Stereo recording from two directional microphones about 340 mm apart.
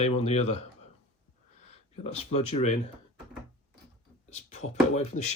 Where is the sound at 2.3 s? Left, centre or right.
Left.